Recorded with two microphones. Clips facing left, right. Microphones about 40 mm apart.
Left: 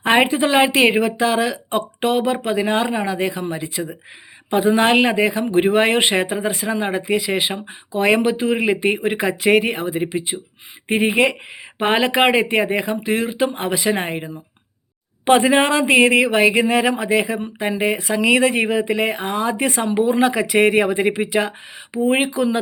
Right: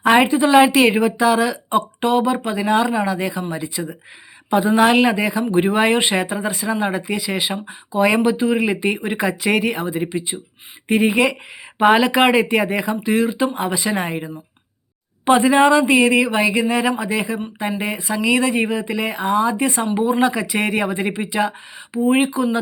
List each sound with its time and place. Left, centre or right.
0.0 s a woman's voice: left
0.3 s speech: left
0.5 s a woman's voice: left
2.0 s speech: left
2.4 s speech: left
6.2 s a woman's voice: left
10.1 s speech: left
10.8 s speech: left
15.2 s speech: left
19.5 s speech: left
21.9 s speech: left